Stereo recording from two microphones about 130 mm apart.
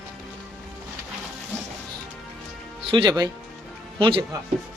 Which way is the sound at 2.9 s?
35° right (ahead or behind).